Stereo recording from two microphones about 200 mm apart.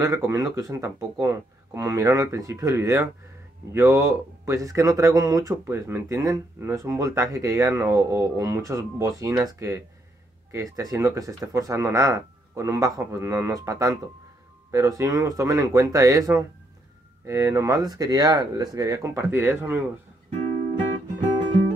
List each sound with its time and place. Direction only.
0.0 s speech: 15° right (ahead or behind)